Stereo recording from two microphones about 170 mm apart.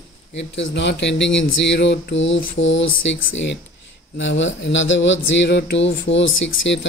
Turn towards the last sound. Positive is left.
turn(degrees=90)